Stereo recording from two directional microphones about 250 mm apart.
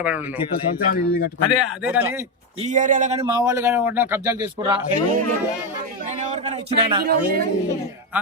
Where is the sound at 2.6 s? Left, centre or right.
Right.